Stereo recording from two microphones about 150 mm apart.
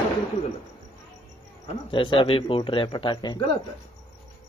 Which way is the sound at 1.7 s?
35° left (ahead or behind).